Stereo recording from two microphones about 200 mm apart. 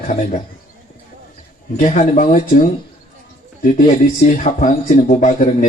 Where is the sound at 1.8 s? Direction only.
35° left (ahead or behind).